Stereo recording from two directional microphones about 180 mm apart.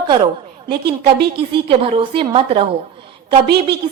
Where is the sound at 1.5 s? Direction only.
30° right (ahead or behind).